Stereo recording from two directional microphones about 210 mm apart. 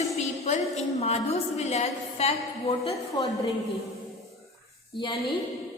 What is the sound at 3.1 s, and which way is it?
Speech, 15° left (ahead or behind).